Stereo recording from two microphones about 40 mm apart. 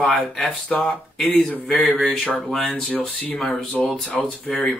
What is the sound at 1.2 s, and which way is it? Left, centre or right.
Speech, left.